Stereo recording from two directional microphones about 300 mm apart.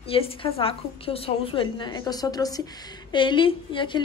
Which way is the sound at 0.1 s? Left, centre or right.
Centre.